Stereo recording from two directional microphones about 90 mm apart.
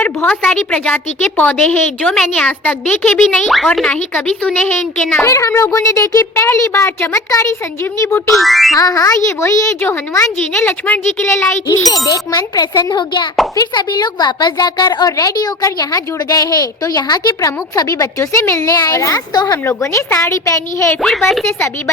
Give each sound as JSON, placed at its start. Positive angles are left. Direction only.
{"t": 0.0, "sound": "a sound", "side_deg": 20}
{"t": 0.5, "sound": "a woman's voice", "side_deg": 20}
{"t": 3.4, "sound": "speech", "side_deg": 0}
{"t": 3.8, "sound": "a woman's voice", "side_deg": 15}
{"t": 5.1, "sound": "a child's voice", "side_deg": 35}
{"t": 8.4, "sound": "speech", "side_deg": 0}
{"t": 8.7, "sound": "a child's voice", "side_deg": 40}
{"t": 11.3, "sound": "a child's voice", "side_deg": 30}
{"t": 21.0, "sound": "speech", "side_deg": 5}